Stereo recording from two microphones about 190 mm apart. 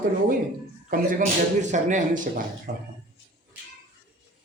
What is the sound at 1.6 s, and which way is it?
Speech, 40° right (ahead or behind).